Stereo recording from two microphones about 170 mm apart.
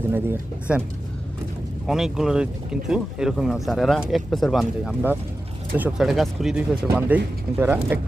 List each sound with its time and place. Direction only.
0.1 s speech: 10° right (ahead or behind)
1.9 s speech: 5° right (ahead or behind)